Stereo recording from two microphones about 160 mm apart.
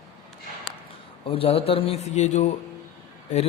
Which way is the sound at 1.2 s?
35° left (ahead or behind).